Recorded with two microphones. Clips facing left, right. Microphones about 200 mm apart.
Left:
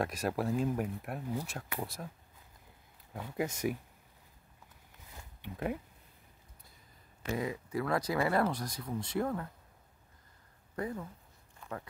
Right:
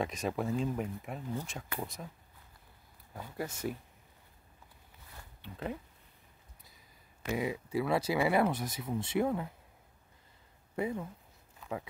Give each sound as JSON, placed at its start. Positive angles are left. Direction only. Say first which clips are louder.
{"t": 0.0, "sound": "speech", "louder": "left 1 dB", "side_deg": 0}
{"t": 3.3, "sound": "speech", "louder": "left 4 dB", "side_deg": 15}
{"t": 5.1, "sound": "a sound", "louder": "left 3 dB", "side_deg": 10}
{"t": 7.2, "sound": "speech", "louder": "right 1 dB", "side_deg": -15}
{"t": 8.5, "sound": "speech", "louder": "right 2 dB", "side_deg": -25}
{"t": 9.2, "sound": "speech", "louder": "right 3 dB", "side_deg": -10}
{"t": 10.8, "sound": "speech", "louder": "right 3 dB", "side_deg": -10}